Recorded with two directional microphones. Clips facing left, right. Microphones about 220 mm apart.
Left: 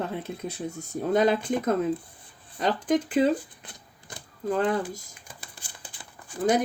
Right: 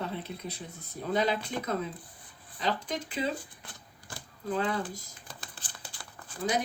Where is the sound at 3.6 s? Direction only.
20° left (ahead or behind).